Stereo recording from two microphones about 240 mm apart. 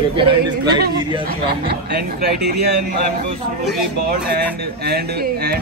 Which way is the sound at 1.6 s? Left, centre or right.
Right.